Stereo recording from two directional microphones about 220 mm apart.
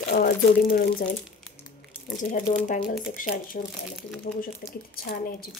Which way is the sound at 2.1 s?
35° left (ahead or behind).